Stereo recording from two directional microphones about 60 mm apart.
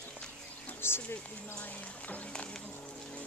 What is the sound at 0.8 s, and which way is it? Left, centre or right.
Speech, left.